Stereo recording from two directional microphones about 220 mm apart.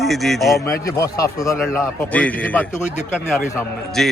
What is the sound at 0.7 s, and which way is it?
Speech, 15° left (ahead or behind).